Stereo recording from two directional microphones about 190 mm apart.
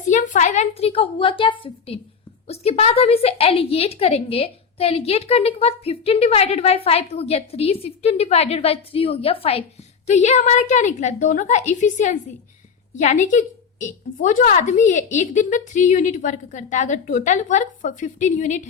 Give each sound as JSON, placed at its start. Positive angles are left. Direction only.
{"t": 0.0, "sound": "a woman's voice", "side_deg": 40}